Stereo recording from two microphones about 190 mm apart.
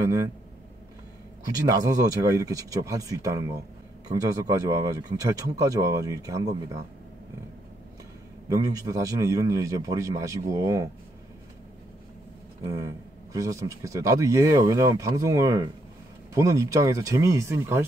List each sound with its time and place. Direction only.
1.8 s speech: 20° right (ahead or behind)
8.5 s speech: 20° right (ahead or behind)
12.6 s speech: 15° right (ahead or behind)